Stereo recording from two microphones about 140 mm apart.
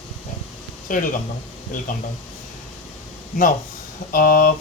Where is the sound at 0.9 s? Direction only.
80° left.